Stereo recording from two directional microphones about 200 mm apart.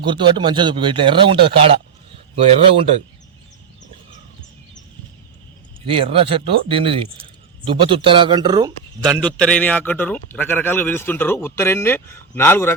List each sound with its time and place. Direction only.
0.0 s speech: 25° right (ahead or behind)
6.1 s speech: 25° right (ahead or behind)
9.0 s a man's voice: 5° left (ahead or behind)